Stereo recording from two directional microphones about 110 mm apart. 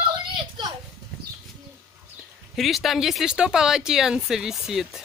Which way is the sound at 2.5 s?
Centre (ahead or behind).